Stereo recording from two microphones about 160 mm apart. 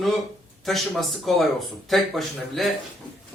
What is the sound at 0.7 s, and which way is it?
A man's voice, centre (ahead or behind).